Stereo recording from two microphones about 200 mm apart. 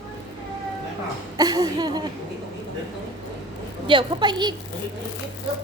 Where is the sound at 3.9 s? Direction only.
25° right (ahead or behind).